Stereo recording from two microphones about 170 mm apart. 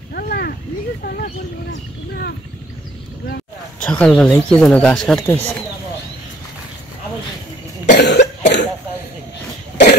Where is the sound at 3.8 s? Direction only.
5° left (ahead or behind).